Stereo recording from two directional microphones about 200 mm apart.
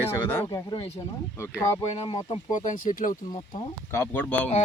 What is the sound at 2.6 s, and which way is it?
Speech, 40° left (ahead or behind).